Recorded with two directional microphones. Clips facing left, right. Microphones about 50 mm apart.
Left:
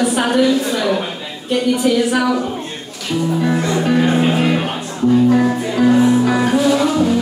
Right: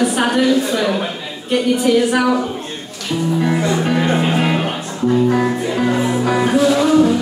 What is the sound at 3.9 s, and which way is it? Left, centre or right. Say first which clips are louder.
Music: left 2 dB; centre.